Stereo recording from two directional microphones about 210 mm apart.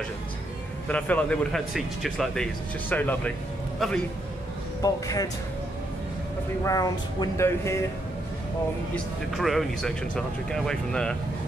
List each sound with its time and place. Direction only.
0.8 s speech: 5° left (ahead or behind)
4.8 s speech: 15° left (ahead or behind)
6.6 s speech: 15° left (ahead or behind)
8.9 s speech: centre (ahead or behind)